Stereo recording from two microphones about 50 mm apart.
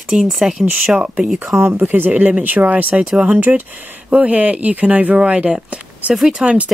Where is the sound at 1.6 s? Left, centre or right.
Right.